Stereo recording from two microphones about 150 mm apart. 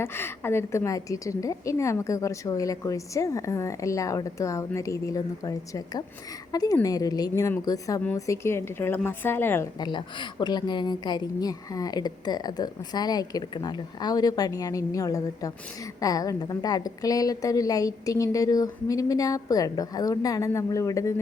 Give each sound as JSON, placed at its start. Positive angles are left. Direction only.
{"t": 0.0, "sound": "a woman's voice", "side_deg": 15}
{"t": 9.8, "sound": "a woman's voice", "side_deg": 30}